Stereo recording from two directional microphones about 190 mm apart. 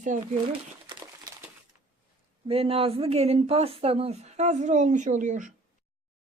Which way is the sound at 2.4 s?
30° right (ahead or behind).